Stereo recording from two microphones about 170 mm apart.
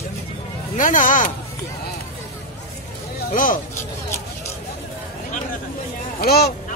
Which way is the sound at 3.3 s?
50° left (ahead or behind).